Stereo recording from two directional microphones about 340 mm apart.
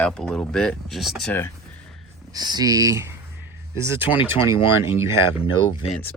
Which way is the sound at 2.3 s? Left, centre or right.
Centre.